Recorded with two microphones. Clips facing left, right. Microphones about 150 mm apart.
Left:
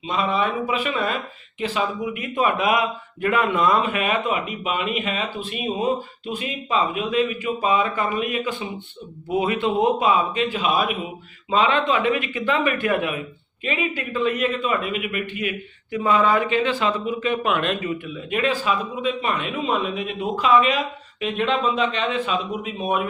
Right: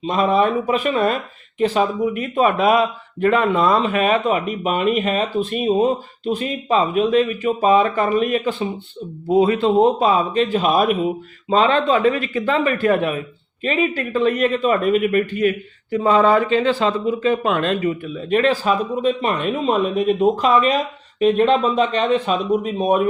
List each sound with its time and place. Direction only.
0.0 s a man's voice: 45° right (ahead or behind)